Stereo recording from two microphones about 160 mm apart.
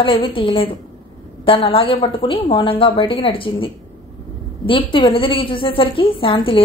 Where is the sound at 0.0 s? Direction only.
30° left (ahead or behind).